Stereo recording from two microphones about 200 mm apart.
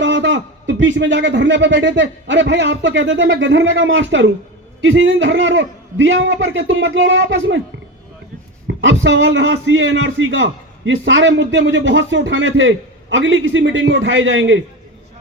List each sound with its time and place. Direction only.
0.0 s a man's voice: 65° right (ahead or behind)
8.6 s a man's voice: 65° right (ahead or behind)